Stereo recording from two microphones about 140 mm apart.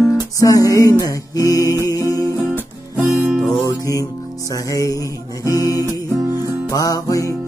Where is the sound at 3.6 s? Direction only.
25° left (ahead or behind).